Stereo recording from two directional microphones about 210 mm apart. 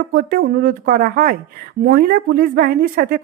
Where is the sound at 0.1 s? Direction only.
45° right (ahead or behind).